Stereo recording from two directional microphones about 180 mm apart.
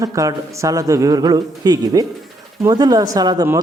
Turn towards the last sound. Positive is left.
turn(degrees=-20)  # may be behind; listen again after turning